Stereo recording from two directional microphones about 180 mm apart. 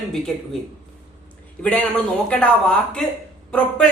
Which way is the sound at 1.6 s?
5° left (ahead or behind).